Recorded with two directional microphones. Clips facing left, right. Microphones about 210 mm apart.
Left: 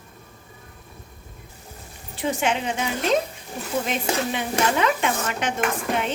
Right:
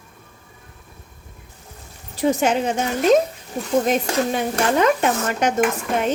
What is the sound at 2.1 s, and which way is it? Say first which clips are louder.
Speech: right 6 dB; 40° right (ahead or behind).